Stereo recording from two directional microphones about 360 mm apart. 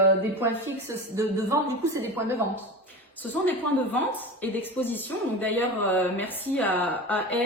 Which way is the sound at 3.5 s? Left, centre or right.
Centre.